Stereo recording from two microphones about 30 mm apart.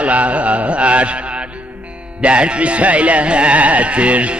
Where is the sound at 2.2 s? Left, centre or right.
Right.